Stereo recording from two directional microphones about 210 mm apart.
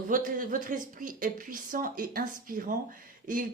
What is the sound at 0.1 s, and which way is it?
Speech, 40° right (ahead or behind).